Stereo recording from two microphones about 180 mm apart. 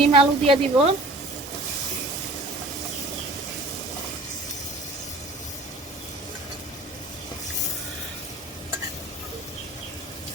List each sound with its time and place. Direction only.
0.1 s a woman's voice: 30° right (ahead or behind)